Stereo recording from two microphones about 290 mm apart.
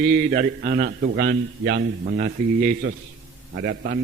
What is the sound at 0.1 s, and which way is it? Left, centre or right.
A man's voice, right.